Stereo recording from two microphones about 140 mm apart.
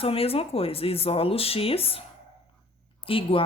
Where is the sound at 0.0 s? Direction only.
45° left (ahead or behind).